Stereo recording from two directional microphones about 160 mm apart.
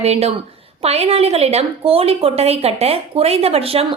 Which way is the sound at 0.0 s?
40° right (ahead or behind).